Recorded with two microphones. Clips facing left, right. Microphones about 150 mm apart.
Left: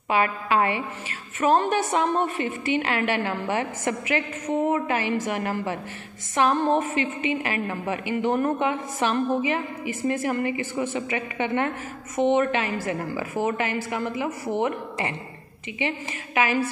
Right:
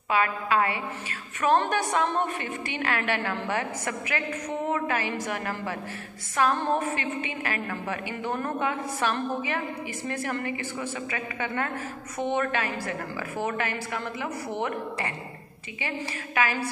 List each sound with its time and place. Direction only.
0.1 s a woman's voice: 25° left (ahead or behind)
1.4 s a woman's voice: 10° left (ahead or behind)
16.3 s a woman's voice: 15° left (ahead or behind)